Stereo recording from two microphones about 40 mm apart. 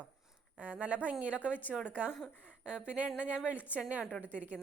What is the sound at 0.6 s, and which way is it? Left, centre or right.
A woman's voice, right.